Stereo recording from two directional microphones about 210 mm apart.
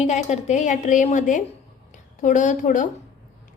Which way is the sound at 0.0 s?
35° left (ahead or behind).